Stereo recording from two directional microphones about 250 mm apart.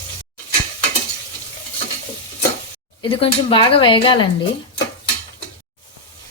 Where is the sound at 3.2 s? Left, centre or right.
Left.